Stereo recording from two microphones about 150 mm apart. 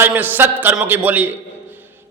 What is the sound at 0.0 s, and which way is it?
A man's voice, 10° right (ahead or behind).